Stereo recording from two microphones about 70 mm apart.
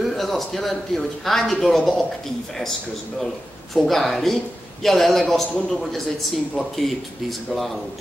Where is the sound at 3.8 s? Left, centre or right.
Centre.